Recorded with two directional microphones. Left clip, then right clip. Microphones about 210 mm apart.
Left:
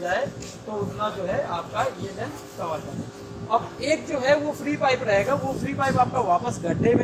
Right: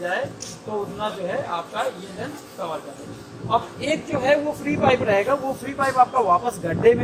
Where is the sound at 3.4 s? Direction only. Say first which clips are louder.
Right 1 dB; 20° right (ahead or behind).